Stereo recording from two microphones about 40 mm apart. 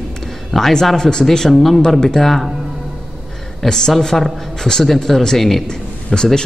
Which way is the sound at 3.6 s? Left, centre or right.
Centre.